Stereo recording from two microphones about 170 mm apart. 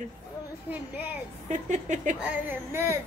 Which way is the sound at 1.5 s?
45° right (ahead or behind).